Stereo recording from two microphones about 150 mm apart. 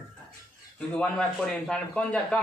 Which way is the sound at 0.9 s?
5° left (ahead or behind).